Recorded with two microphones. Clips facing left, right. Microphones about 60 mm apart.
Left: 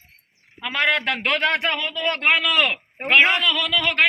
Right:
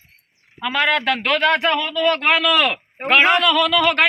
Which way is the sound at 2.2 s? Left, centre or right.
Centre.